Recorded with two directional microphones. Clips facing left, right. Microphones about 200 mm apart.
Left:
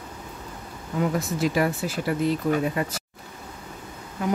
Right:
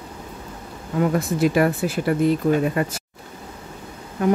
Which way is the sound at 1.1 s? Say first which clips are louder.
Right 6 dB; 55° right (ahead or behind).